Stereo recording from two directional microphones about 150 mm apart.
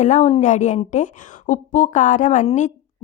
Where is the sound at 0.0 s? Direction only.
50° left (ahead or behind).